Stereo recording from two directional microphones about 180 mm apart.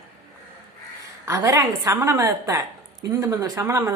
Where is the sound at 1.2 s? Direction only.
15° right (ahead or behind).